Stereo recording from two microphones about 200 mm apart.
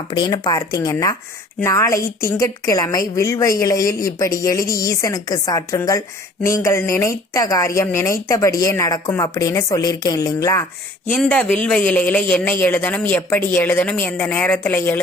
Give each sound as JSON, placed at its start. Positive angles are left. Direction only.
{"t": 0.1, "sound": "speech", "side_deg": 20}